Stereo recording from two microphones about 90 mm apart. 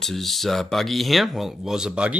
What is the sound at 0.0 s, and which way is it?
Speech, centre (ahead or behind).